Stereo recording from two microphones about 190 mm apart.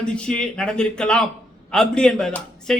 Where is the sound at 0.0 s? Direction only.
5° left (ahead or behind).